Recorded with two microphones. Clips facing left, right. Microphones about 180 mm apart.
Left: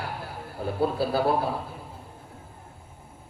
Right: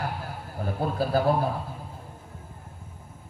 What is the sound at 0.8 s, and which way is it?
Speech, 45° right (ahead or behind).